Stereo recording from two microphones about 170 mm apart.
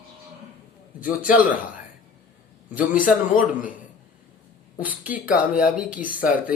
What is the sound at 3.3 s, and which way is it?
Speech, 55° left (ahead or behind).